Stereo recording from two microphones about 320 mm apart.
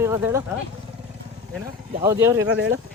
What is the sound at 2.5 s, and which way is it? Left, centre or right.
Speech, right.